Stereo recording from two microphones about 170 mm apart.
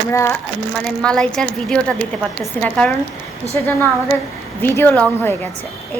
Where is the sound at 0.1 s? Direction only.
15° left (ahead or behind).